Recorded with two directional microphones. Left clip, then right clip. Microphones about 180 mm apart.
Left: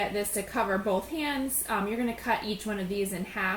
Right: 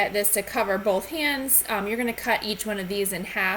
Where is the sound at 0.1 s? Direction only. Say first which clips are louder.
Right 6 dB; 10° right (ahead or behind).